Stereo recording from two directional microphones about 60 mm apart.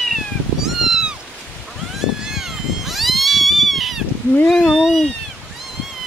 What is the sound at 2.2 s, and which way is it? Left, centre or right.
Cat, centre.